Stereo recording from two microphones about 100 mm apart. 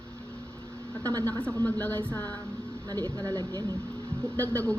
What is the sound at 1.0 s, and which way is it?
Speech, 35° right (ahead or behind).